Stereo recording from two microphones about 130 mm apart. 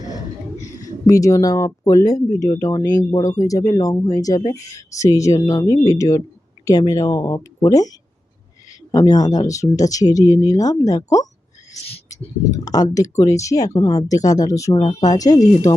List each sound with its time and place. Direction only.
0.6 s speech: 30° left (ahead or behind)
12.5 s speech: 30° left (ahead or behind)